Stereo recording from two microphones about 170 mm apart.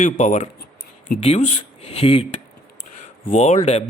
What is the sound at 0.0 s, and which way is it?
A man's voice, 45° left (ahead or behind).